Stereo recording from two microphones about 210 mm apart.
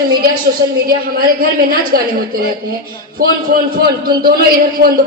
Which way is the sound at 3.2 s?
45° right (ahead or behind).